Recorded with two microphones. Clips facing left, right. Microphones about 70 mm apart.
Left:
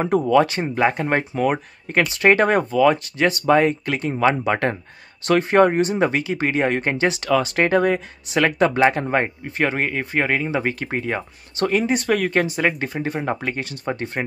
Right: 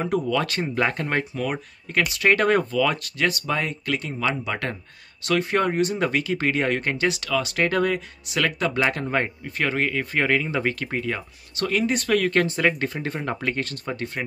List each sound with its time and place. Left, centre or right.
0.0 s speech: left
0.5 s speech: centre
1.3 s speech: left
4.1 s speech: left; by 13.7 s centre
13.8 s speech: left